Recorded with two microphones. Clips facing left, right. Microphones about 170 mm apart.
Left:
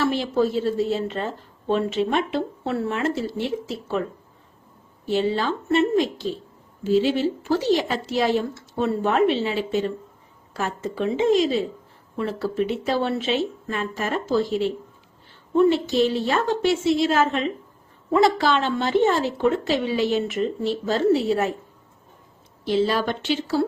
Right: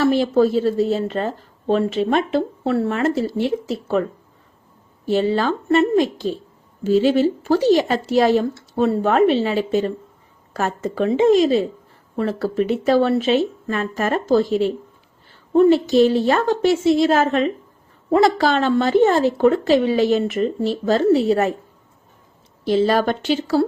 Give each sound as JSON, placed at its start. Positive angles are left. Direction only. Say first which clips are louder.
{"t": 0.0, "sound": "a sound", "louder": "right 6 dB", "side_deg": -40}
{"t": 0.4, "sound": "a woman's voice", "louder": "right 5 dB", "side_deg": -40}
{"t": 5.0, "sound": "a woman's voice", "louder": "right 4 dB", "side_deg": -45}
{"t": 22.6, "sound": "a woman's voice", "louder": "right 4 dB", "side_deg": -45}